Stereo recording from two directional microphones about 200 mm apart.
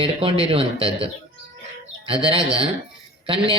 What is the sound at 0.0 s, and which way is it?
A man's voice, 25° right (ahead or behind).